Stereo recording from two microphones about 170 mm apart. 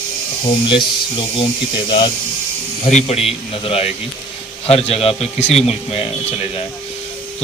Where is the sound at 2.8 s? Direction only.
40° left (ahead or behind).